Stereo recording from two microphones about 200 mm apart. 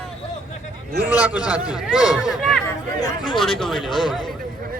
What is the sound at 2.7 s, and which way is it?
Speech, 20° left (ahead or behind).